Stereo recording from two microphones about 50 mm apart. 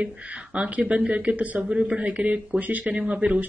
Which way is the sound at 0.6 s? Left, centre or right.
Right.